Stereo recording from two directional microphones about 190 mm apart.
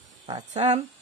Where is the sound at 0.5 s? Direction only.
35° right (ahead or behind).